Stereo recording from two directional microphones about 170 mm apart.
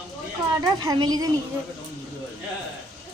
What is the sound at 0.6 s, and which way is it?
Speech, 25° right (ahead or behind).